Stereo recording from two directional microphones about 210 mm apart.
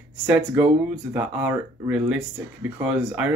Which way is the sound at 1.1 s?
5° right (ahead or behind).